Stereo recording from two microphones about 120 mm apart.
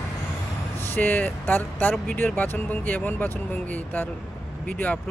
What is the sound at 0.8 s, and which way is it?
Speech, 15° left (ahead or behind).